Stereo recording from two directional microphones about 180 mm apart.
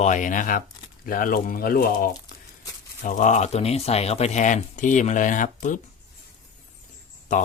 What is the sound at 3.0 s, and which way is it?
Speech, 45° left (ahead or behind).